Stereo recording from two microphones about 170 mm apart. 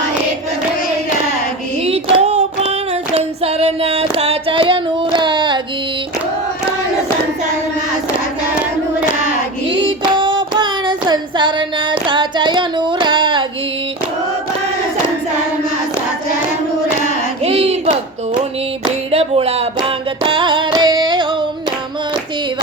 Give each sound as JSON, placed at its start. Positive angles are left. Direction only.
{"t": 1.8, "sound": "female singing", "side_deg": -35}
{"t": 9.6, "sound": "child singing", "side_deg": -30}
{"t": 17.4, "sound": "hands", "side_deg": -35}
{"t": 19.1, "sound": "a sound", "side_deg": -35}
{"t": 20.2, "sound": "carnatic music", "side_deg": -30}